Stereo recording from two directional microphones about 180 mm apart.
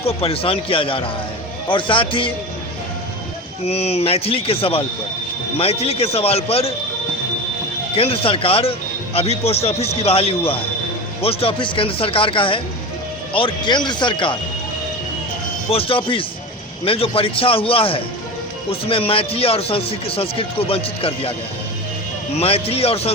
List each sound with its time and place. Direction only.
0.0 s speech: 35° left (ahead or behind)
3.6 s speech: 35° left (ahead or behind)
7.9 s speech: 30° left (ahead or behind)
15.7 s speech: 30° left (ahead or behind)
22.4 s speech: 35° left (ahead or behind)